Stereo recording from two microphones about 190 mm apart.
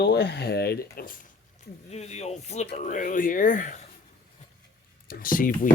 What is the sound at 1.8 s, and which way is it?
Speech, 35° left (ahead or behind).